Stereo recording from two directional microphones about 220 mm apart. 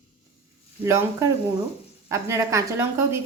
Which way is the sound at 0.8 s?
10° right (ahead or behind).